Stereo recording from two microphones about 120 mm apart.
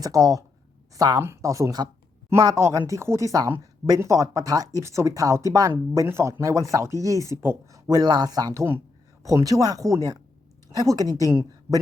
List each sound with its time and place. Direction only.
0.0 s a woman's voice: 30° right (ahead or behind)
11.3 s speech: 25° right (ahead or behind)